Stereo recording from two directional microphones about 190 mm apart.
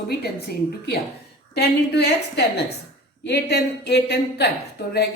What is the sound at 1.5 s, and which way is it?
A man's voice, 60° left (ahead or behind).